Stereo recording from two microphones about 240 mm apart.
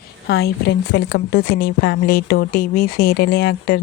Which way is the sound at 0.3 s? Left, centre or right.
Left.